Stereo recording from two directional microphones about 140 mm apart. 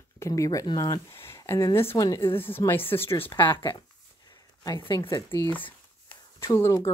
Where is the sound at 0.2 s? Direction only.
25° left (ahead or behind).